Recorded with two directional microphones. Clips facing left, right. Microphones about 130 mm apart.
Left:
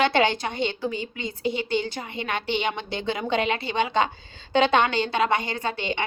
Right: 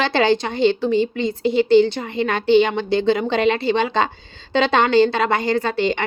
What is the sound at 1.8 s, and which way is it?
A woman's voice, 35° right (ahead or behind).